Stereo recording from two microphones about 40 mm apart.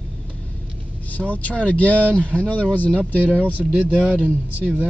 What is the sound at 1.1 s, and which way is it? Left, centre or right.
Speech, left.